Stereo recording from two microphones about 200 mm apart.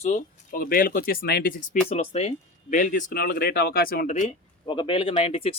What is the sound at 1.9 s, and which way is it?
Speech, 30° left (ahead or behind).